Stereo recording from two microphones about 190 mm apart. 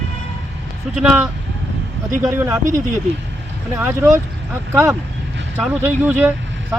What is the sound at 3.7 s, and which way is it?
Speech, 15° right (ahead or behind).